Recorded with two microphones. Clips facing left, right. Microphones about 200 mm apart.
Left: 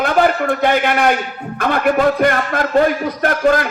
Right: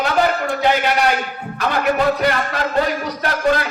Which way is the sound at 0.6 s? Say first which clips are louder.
Left 2 dB; 55° left (ahead or behind).